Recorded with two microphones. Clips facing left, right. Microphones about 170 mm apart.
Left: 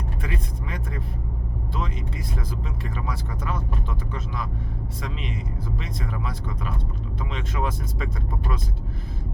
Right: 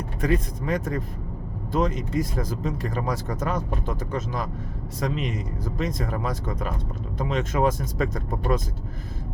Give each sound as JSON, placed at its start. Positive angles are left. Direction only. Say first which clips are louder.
{"t": 0.2, "sound": "speech", "louder": "right 13 dB", "side_deg": -45}